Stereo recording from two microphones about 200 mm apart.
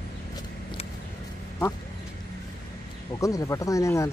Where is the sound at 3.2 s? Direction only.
15° left (ahead or behind).